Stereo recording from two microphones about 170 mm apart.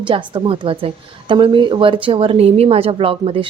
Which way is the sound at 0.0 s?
30° right (ahead or behind).